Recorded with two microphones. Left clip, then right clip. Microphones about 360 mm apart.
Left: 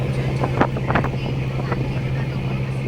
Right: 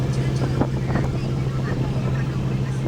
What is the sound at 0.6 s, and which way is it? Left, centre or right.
Vehicle, left.